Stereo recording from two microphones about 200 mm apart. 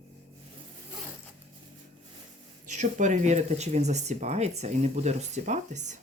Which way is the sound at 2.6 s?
35° right (ahead or behind).